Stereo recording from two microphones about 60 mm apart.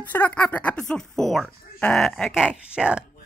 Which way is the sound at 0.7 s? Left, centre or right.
Centre.